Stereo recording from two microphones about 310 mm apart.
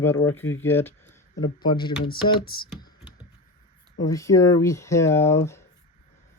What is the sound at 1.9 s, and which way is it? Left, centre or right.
Speech, left.